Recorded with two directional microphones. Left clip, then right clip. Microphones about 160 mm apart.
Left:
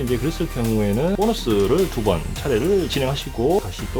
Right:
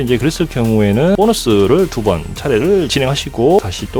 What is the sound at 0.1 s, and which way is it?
Speech, 60° right (ahead or behind).